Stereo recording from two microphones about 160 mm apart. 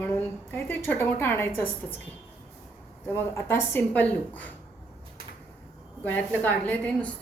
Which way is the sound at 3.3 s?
15° left (ahead or behind).